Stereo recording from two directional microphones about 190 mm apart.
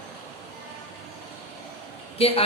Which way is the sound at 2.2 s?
30° left (ahead or behind).